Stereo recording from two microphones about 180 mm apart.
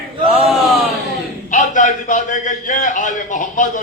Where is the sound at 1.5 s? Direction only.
45° left (ahead or behind).